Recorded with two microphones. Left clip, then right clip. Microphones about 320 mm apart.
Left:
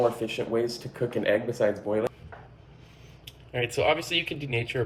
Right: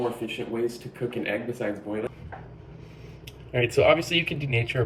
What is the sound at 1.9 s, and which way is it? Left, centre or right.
Speech, left.